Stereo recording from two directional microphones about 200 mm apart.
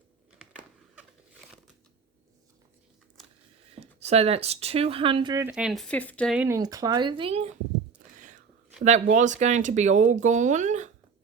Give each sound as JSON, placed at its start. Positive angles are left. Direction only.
{"t": 0.3, "sound": "crumpling", "side_deg": -5}
{"t": 3.7, "sound": "speech", "side_deg": -30}
{"t": 5.5, "sound": "speech", "side_deg": -5}
{"t": 6.3, "sound": "speech", "side_deg": -10}
{"t": 8.0, "sound": "whispering", "side_deg": -40}
{"t": 8.8, "sound": "speech", "side_deg": -35}